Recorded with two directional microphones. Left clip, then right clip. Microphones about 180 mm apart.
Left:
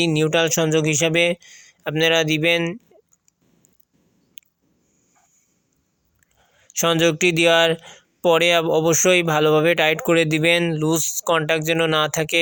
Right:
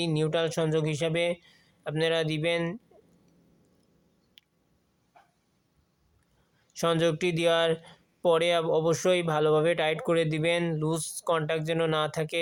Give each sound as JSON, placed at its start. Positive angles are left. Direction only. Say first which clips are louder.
{"t": 0.0, "sound": "speech", "louder": "left 9 dB", "side_deg": 30}
{"t": 4.4, "sound": "a sound", "louder": "left 9 dB", "side_deg": 25}
{"t": 6.7, "sound": "speech", "louder": "left 8 dB", "side_deg": 25}